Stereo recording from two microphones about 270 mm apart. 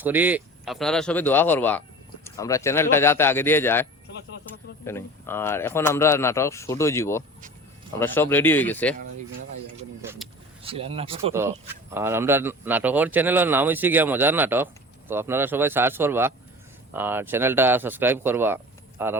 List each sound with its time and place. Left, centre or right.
0.0 s speech: centre
4.9 s speech: centre
10.0 s vehicle: centre
10.6 s speech: right
11.3 s speech: centre